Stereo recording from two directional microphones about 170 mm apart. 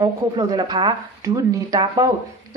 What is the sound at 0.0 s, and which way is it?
A woman's voice, 25° right (ahead or behind).